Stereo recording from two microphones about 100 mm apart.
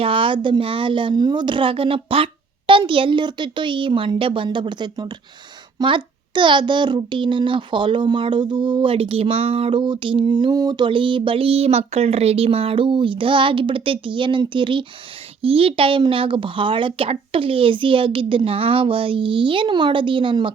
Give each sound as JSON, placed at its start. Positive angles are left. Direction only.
{"t": 0.0, "sound": "speech", "side_deg": -60}
{"t": 9.8, "sound": "speech", "side_deg": -55}
{"t": 15.4, "sound": "speech", "side_deg": -65}